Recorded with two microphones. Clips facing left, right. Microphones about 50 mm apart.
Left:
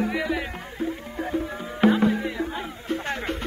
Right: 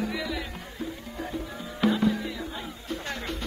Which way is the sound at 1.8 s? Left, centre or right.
Left.